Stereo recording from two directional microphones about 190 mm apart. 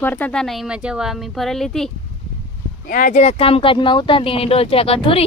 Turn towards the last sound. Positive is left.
turn(degrees=30)  # may be behind; listen again after turning